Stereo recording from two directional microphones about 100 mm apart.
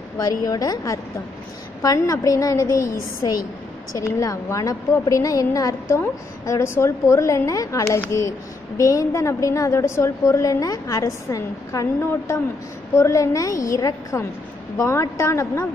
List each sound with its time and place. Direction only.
0.2 s a woman's voice: 40° left (ahead or behind)